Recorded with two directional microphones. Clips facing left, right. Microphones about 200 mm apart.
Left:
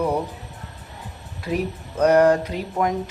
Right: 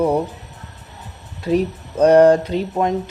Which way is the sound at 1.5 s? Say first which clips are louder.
Right 7 dB; 30° right (ahead or behind).